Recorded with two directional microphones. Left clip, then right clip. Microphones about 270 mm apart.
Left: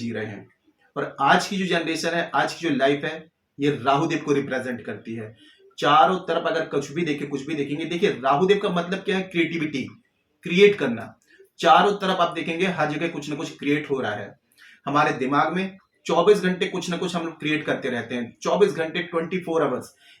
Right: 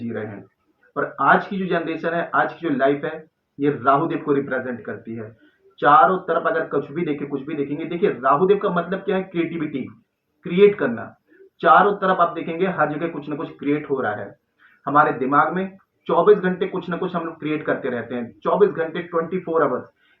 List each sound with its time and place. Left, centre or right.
1.1 s speech: left